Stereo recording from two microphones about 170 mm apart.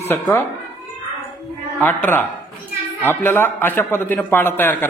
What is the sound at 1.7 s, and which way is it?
A man's voice, 10° left (ahead or behind).